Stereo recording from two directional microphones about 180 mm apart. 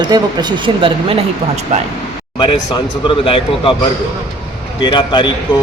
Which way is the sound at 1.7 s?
40° right (ahead or behind).